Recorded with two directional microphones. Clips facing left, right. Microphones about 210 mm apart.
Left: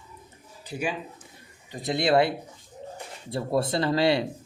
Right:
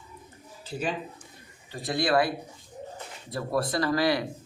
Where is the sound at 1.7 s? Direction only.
20° left (ahead or behind).